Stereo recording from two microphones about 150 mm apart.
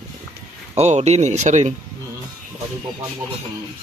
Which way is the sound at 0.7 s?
45° right (ahead or behind).